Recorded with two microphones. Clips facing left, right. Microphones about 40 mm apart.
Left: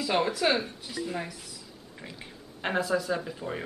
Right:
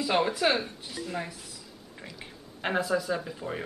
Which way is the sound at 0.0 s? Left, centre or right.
Centre.